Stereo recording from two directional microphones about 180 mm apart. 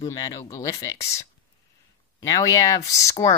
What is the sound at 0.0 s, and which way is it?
Speech, 20° left (ahead or behind).